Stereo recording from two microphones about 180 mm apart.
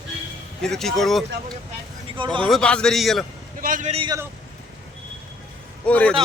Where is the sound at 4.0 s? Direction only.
20° right (ahead or behind).